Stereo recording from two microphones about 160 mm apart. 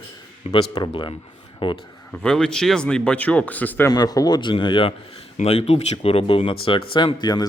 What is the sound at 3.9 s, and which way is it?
Speech, 25° left (ahead or behind).